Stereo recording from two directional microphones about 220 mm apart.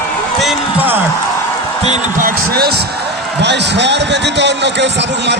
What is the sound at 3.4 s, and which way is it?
A man's voice, 50° right (ahead or behind).